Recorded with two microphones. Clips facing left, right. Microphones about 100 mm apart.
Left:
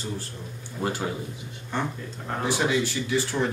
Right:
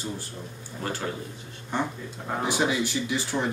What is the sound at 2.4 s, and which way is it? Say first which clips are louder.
Speech: left 1 dB; 15° right (ahead or behind).